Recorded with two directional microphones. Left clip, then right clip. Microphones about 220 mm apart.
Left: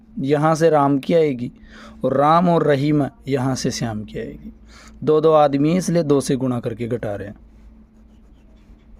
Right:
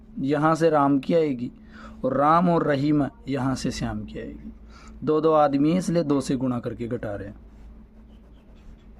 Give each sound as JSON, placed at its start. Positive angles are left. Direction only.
{"t": 0.2, "sound": "speech", "side_deg": 35}